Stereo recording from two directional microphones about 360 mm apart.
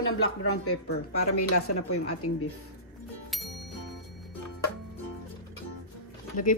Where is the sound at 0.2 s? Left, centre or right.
Left.